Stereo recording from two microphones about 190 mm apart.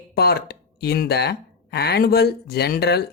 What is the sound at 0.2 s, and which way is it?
Speech, 55° left (ahead or behind).